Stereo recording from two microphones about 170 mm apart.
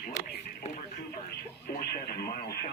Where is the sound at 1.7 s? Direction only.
70° left (ahead or behind).